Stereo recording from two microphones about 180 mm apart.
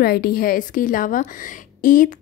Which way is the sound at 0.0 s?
55° left (ahead or behind).